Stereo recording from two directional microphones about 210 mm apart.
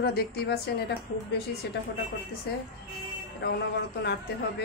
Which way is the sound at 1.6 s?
55° left (ahead or behind).